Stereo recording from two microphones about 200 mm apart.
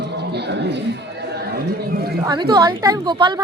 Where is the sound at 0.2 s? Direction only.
55° right (ahead or behind).